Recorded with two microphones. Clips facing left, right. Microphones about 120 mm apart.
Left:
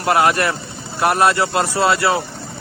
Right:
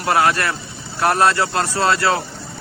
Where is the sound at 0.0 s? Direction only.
20° left (ahead or behind).